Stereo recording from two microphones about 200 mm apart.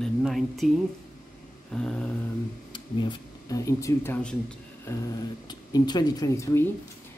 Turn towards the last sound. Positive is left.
turn(degrees=15)  # may be behind; listen again after turning